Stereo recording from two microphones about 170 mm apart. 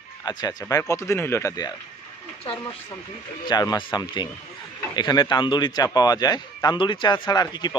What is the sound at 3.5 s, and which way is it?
A man's voice, 25° left (ahead or behind).